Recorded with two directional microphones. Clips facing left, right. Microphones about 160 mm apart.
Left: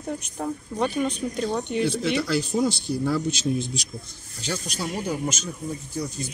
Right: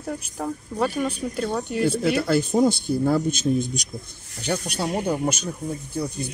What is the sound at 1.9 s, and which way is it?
A man's voice, 55° right (ahead or behind).